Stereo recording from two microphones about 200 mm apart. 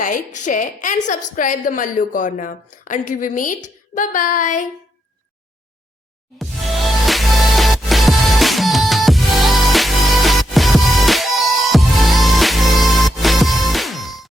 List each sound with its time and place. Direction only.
0.0 s a woman's voice: 40° left (ahead or behind)
7.0 s music: centre (ahead or behind)